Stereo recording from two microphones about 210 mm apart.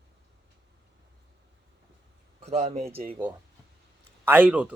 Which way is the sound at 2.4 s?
30° right (ahead or behind).